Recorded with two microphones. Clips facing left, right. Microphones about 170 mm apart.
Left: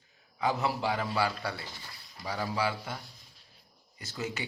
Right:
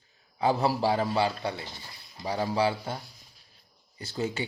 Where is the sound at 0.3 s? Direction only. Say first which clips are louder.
Right 5 dB; 30° right (ahead or behind).